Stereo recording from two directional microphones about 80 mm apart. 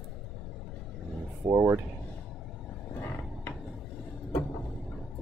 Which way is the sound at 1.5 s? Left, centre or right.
Right.